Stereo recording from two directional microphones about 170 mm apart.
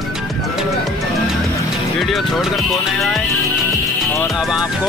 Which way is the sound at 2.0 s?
Centre (ahead or behind).